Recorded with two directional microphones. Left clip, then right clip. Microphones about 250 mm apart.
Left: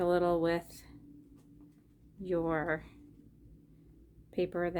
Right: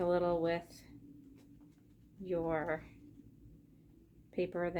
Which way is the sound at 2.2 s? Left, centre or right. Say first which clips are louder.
Left 3 dB; left.